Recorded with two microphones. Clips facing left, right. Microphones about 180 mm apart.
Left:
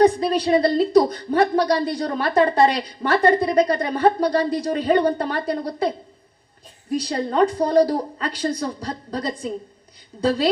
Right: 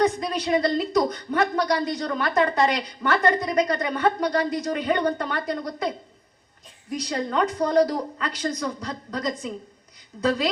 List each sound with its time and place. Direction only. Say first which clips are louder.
0.0 s a woman's voice: left 6 dB; 30° left (ahead or behind)
6.9 s a woman's voice: left 4 dB; 30° left (ahead or behind)